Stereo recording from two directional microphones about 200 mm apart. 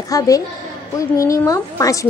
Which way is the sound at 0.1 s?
15° left (ahead or behind).